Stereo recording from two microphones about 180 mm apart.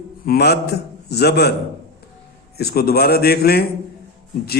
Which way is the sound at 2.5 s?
60° left (ahead or behind).